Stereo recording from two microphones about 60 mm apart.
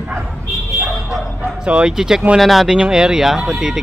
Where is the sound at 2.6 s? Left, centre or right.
Centre.